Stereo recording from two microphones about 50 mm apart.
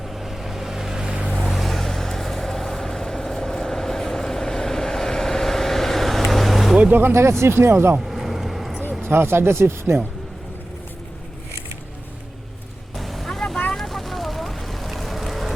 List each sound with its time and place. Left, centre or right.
0.1 s vehicle: centre
1.4 s vehicle: centre
7.1 s speech: right
8.0 s vehicle: centre
9.0 s speech: right
13.0 s vehicle: centre